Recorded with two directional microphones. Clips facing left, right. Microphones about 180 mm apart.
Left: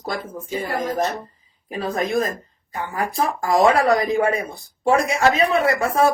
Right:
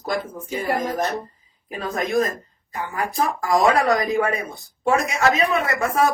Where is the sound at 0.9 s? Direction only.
30° left (ahead or behind).